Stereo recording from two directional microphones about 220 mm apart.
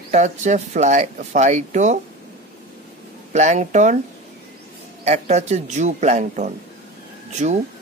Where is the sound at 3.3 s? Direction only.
30° right (ahead or behind).